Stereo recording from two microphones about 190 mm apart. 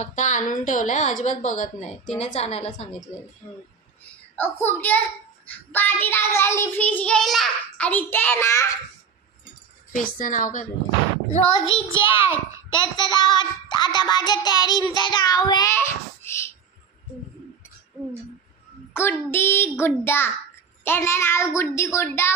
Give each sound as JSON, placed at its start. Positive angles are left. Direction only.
{"t": 0.0, "sound": "a woman's voice", "side_deg": 40}
{"t": 4.0, "sound": "a child's voice", "side_deg": 10}
{"t": 5.5, "sound": "child singing", "side_deg": 10}
{"t": 9.9, "sound": "a woman's voice", "side_deg": 45}
{"t": 11.3, "sound": "child singing", "side_deg": 30}
{"t": 18.9, "sound": "child singing", "side_deg": 10}